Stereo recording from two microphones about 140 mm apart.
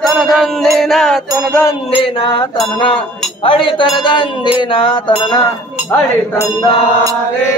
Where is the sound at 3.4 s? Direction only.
35° left (ahead or behind).